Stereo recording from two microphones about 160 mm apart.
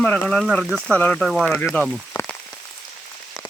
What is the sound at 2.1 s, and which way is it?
Frying, 15° left (ahead or behind).